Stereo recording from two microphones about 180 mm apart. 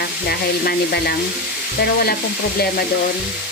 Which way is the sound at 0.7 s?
60° left (ahead or behind).